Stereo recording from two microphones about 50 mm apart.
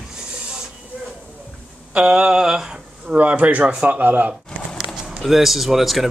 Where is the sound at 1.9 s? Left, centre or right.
Centre.